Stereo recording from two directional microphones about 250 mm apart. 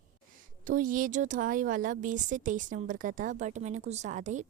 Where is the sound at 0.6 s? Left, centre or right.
Right.